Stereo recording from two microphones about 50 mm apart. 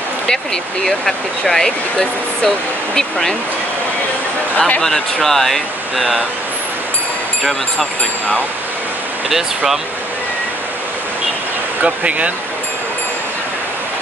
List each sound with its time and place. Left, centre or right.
0.8 s speech: centre
4.6 s speech: left
4.8 s speech: centre
11.8 s speech: right